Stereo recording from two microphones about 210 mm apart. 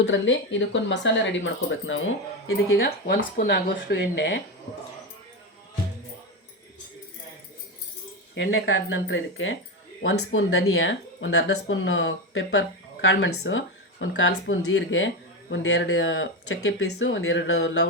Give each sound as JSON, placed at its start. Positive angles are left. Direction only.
{"t": 0.0, "sound": "speech", "side_deg": 65}
{"t": 2.7, "sound": "speech", "side_deg": 45}
{"t": 8.4, "sound": "speech", "side_deg": 65}